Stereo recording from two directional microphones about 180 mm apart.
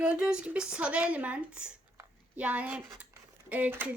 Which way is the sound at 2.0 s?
10° right (ahead or behind).